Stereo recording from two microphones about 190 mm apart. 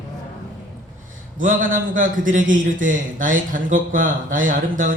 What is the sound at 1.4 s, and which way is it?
Speech, 45° right (ahead or behind).